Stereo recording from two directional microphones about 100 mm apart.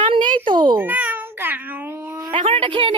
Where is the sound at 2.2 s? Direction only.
50° right (ahead or behind).